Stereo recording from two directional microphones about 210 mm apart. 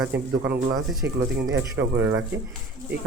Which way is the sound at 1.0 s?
65° right (ahead or behind).